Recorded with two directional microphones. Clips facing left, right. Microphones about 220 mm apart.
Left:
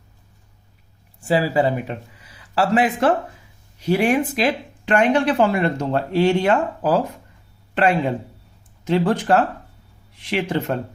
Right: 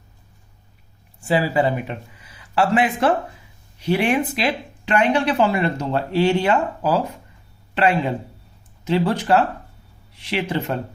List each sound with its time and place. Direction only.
1.2 s speech: 35° left (ahead or behind)